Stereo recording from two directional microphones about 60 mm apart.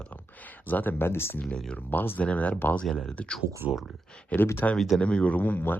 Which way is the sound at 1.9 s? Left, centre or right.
Left.